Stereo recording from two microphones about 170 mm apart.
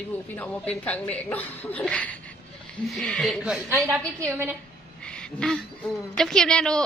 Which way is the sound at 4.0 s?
15° right (ahead or behind).